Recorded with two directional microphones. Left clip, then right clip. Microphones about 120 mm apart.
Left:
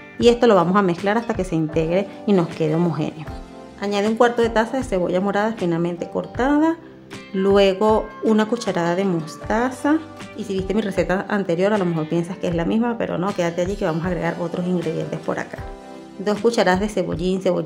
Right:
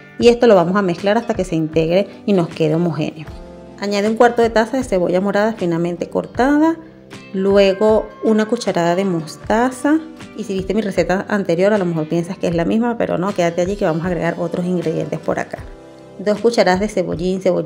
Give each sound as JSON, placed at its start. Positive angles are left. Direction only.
{"t": 0.2, "sound": "a woman's voice", "side_deg": -15}
{"t": 7.3, "sound": "a woman's voice", "side_deg": -15}
{"t": 11.7, "sound": "speech", "side_deg": 0}
{"t": 12.1, "sound": "speech", "side_deg": -30}
{"t": 16.4, "sound": "a woman's voice", "side_deg": -15}